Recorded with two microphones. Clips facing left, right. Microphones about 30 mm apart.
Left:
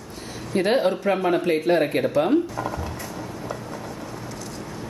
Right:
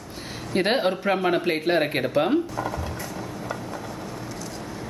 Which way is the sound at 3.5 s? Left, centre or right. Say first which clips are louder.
Right 1 dB; centre.